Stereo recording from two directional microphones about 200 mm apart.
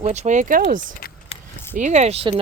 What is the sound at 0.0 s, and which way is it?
Speech, 35° right (ahead or behind).